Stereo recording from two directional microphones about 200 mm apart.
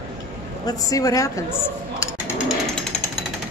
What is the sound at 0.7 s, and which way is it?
A woman's voice, 15° left (ahead or behind).